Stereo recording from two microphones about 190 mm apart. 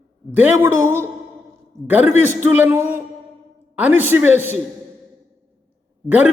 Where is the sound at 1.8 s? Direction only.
10° right (ahead or behind).